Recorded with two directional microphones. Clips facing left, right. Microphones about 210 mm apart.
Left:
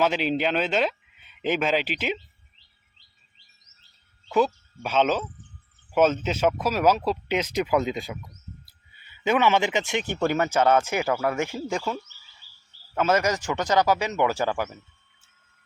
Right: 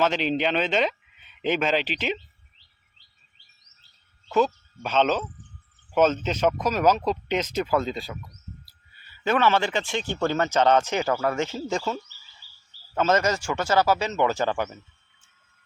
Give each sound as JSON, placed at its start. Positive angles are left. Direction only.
{"t": 0.0, "sound": "speech", "side_deg": 10}
{"t": 4.4, "sound": "a man's voice", "side_deg": 10}
{"t": 12.9, "sound": "speech", "side_deg": 10}